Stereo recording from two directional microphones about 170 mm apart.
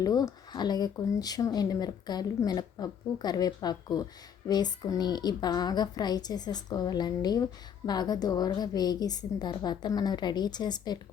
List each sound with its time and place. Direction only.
0.0 s speech: 20° left (ahead or behind)